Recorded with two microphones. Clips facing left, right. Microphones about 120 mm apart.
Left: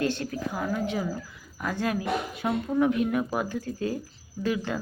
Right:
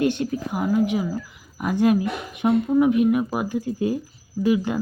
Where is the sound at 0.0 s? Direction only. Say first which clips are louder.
Right 6 dB; 20° right (ahead or behind).